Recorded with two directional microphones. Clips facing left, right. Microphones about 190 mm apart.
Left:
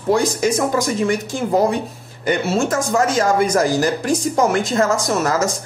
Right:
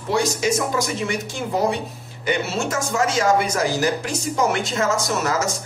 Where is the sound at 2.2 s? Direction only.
45° left (ahead or behind).